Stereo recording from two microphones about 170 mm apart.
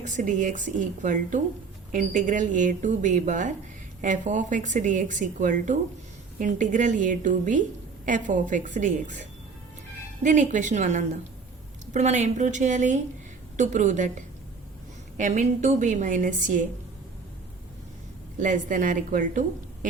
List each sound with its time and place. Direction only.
0.0 s speech: 45° right (ahead or behind)
10.2 s speech: 45° right (ahead or behind)
18.3 s speech: 50° right (ahead or behind)